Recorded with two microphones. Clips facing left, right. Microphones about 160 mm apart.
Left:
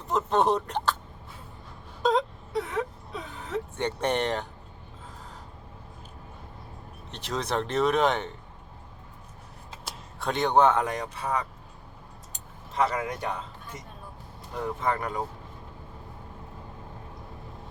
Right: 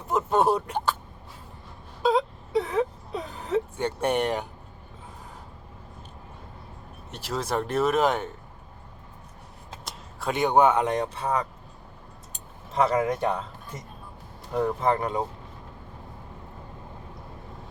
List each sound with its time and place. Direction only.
0.1 s speech: 10° right (ahead or behind)
2.0 s wail: 5° right (ahead or behind)
2.6 s whimper: 35° right (ahead or behind)
3.8 s speech: 10° right (ahead or behind)
7.1 s speech: 5° right (ahead or behind)
9.8 s speech: 5° right (ahead or behind); by 11.3 s 30° right (ahead or behind)
12.7 s speech: 30° right (ahead or behind)
14.8 s speech: 25° right (ahead or behind)